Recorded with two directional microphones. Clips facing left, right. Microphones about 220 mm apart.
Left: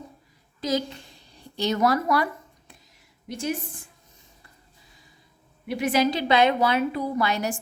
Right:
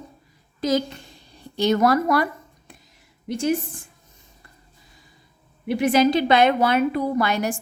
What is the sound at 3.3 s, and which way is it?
Speech, 50° right (ahead or behind).